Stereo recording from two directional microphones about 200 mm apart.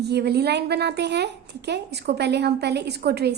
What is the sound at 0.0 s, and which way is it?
A woman's voice, 55° right (ahead or behind).